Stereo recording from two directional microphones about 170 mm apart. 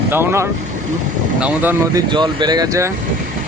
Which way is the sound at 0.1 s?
15° right (ahead or behind).